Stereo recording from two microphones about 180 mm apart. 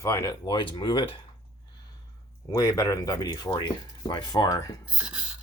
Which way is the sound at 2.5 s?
20° left (ahead or behind).